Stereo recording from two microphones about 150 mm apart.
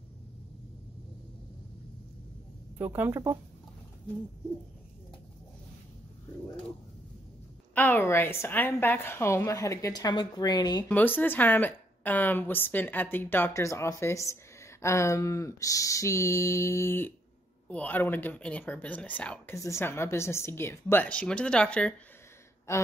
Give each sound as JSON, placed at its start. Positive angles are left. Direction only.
{"t": 2.8, "sound": "speech", "side_deg": -15}
{"t": 7.7, "sound": "a woman's voice", "side_deg": 10}
{"t": 10.9, "sound": "a woman's voice", "side_deg": 10}
{"t": 22.7, "sound": "speech", "side_deg": 20}